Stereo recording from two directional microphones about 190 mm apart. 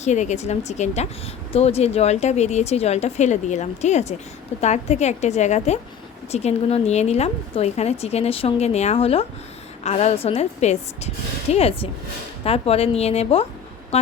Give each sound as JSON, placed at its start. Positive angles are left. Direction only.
{"t": 0.0, "sound": "speech", "side_deg": 40}